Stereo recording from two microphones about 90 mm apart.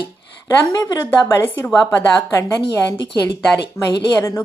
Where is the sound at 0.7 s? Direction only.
40° left (ahead or behind).